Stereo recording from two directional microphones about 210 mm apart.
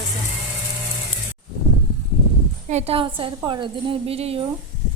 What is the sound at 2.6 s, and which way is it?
A woman's voice, 30° right (ahead or behind).